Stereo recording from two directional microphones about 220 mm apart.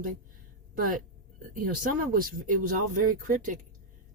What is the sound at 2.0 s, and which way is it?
Speech, 40° right (ahead or behind).